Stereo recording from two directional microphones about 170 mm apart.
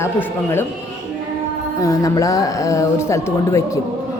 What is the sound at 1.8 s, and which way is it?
A woman's voice, 20° left (ahead or behind).